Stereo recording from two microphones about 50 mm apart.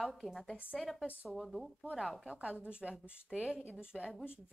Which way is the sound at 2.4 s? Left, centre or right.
Right.